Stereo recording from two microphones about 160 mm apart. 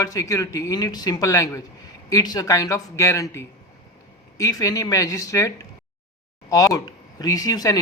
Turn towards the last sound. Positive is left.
turn(degrees=25)  # may be behind; listen again after turning